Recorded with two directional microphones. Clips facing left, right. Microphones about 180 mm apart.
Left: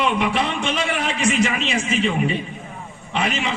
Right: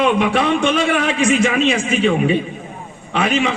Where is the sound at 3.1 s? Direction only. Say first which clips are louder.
Right 6 dB; 55° right (ahead or behind).